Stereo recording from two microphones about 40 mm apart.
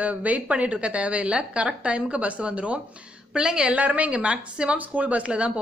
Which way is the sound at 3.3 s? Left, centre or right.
Right.